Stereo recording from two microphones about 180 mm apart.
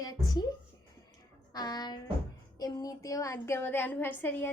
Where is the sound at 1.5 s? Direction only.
20° left (ahead or behind).